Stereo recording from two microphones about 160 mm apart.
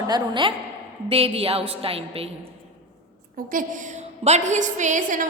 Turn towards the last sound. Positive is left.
turn(degrees=-55)  # may be behind; listen again after turning